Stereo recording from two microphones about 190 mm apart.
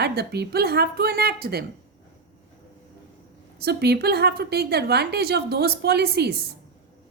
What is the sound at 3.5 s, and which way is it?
A woman's voice, 55° right (ahead or behind).